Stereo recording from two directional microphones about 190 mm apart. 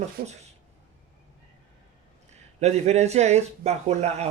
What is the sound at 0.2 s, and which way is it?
Speech, 50° right (ahead or behind).